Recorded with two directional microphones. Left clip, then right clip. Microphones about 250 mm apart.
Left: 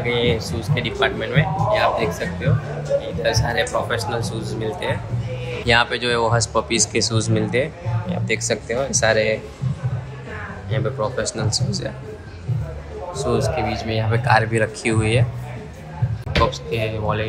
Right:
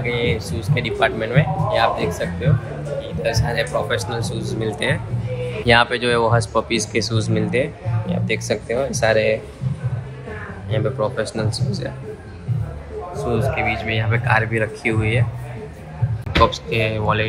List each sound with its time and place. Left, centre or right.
0.0 s speech: centre
2.5 s speech: centre
4.6 s speech: centre
5.7 s speech: centre
10.7 s speech: centre
13.1 s a man's voice: centre
16.4 s speech: centre